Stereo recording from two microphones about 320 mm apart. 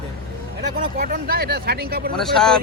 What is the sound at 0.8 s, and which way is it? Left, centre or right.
Speech, right.